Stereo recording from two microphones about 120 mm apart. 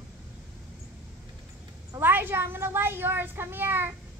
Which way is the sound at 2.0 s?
15° right (ahead or behind).